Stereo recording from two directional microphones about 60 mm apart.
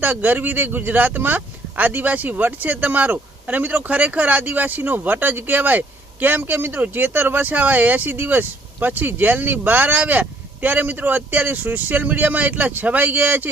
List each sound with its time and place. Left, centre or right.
0.0 s speech: right